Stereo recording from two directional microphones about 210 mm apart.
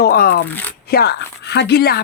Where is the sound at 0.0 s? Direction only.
45° left (ahead or behind).